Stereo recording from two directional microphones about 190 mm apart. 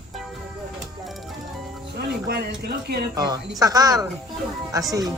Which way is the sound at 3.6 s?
20° right (ahead or behind).